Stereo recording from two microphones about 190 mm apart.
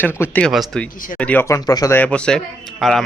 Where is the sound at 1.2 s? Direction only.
10° left (ahead or behind).